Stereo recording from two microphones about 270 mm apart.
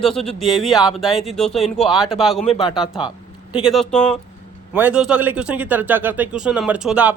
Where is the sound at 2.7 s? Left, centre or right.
Centre.